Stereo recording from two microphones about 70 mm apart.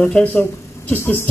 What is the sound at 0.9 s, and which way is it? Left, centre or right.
Speech, left.